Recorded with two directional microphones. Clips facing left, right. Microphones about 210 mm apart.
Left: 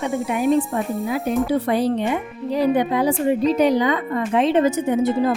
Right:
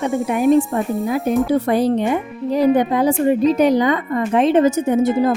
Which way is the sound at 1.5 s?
45° right (ahead or behind).